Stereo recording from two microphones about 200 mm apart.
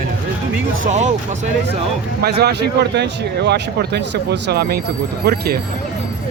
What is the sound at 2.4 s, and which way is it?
Speech, 55° right (ahead or behind).